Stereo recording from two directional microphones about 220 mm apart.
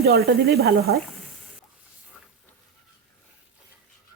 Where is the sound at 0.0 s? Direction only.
45° right (ahead or behind).